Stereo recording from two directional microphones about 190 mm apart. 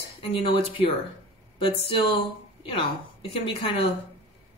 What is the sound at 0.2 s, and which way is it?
Speech, 30° left (ahead or behind).